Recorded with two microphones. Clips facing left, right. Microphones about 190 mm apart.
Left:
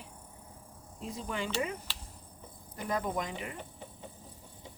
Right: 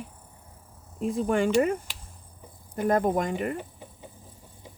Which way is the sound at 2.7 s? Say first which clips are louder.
Right 10 dB; 50° right (ahead or behind).